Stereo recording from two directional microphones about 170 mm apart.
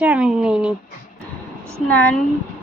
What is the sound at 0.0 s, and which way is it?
Speech, 5° right (ahead or behind).